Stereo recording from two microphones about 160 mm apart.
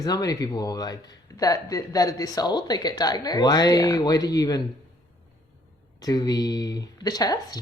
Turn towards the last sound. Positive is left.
turn(degrees=25)  # may be behind; listen again after turning